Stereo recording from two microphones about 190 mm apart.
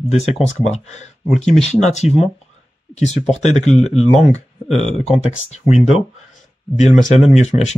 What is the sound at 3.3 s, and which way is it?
Speech, 35° left (ahead or behind).